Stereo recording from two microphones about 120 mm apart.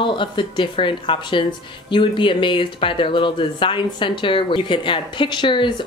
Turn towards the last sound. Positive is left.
turn(degrees=40)  # may be behind; listen again after turning